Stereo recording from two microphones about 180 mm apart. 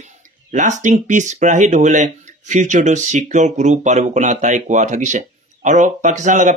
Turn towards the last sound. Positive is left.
turn(degrees=-45)  # may be behind; listen again after turning